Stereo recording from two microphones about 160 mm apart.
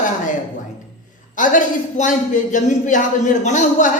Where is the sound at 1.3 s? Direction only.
55° left (ahead or behind).